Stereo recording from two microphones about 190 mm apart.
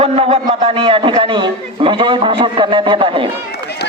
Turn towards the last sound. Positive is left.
turn(degrees=-25)  # may be behind; listen again after turning